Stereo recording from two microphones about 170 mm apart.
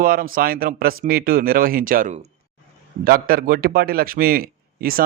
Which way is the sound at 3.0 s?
60° right (ahead or behind).